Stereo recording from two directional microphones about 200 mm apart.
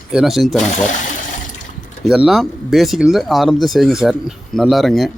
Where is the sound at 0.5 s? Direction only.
35° left (ahead or behind).